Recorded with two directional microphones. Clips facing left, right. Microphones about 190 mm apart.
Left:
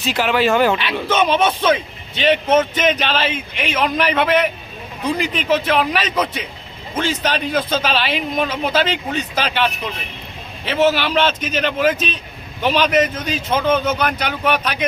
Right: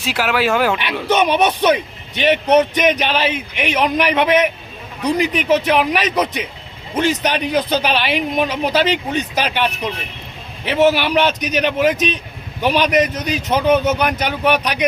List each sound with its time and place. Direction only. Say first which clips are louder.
0.0 s speech: left 1 dB; 10° right (ahead or behind)